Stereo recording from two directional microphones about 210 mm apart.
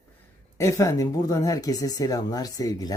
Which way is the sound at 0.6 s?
15° left (ahead or behind).